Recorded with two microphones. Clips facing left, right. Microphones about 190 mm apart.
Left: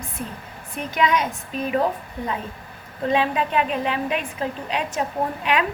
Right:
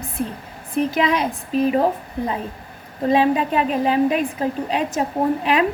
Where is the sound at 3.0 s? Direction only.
35° right (ahead or behind).